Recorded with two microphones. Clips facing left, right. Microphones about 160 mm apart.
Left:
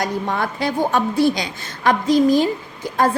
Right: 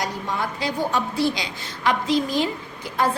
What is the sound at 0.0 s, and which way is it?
A woman's voice, 60° left (ahead or behind).